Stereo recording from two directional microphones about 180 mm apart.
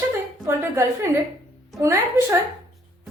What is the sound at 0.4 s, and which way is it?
Speech, 15° right (ahead or behind).